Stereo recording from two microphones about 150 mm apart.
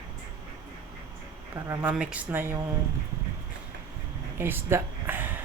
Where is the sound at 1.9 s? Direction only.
10° right (ahead or behind).